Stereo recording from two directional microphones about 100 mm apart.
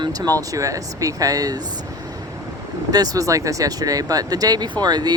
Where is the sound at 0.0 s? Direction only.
40° right (ahead or behind).